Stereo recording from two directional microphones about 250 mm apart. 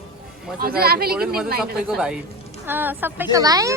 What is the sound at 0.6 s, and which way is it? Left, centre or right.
Speech, right.